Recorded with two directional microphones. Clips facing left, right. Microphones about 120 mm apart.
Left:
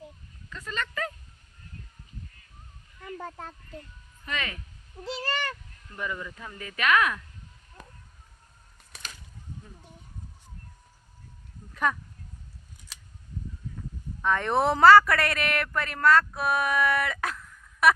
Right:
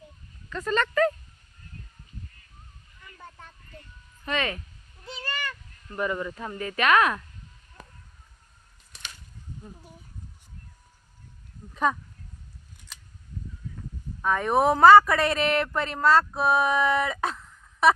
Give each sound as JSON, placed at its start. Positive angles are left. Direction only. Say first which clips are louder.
{"t": 0.6, "sound": "speech", "louder": "right 10 dB", "side_deg": -45}
{"t": 3.2, "sound": "speech", "louder": "left 7 dB", "side_deg": 65}
{"t": 4.3, "sound": "speech", "louder": "right 6 dB", "side_deg": -30}
{"t": 5.3, "sound": "a sound", "louder": "left 2 dB", "side_deg": 35}
{"t": 5.9, "sound": "speech", "louder": "right 6 dB", "side_deg": -40}
{"t": 11.7, "sound": "speech", "louder": "right 2 dB", "side_deg": -20}
{"t": 14.2, "sound": "speech", "louder": "right 2 dB", "side_deg": -10}